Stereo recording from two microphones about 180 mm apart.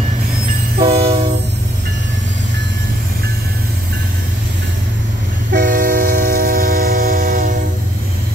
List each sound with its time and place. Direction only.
0.7 s train: 30° right (ahead or behind)
5.5 s train: 55° right (ahead or behind)